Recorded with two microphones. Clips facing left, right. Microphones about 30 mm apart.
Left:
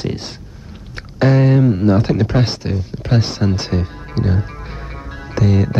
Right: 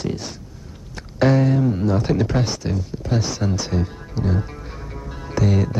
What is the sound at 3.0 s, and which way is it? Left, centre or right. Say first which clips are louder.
Speech: left 5 dB; left.